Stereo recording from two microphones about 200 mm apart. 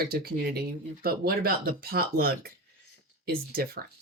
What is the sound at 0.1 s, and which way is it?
Speech, 50° right (ahead or behind).